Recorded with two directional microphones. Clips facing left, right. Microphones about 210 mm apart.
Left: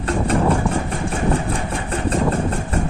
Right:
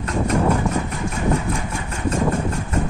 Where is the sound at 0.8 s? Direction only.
30° left (ahead or behind).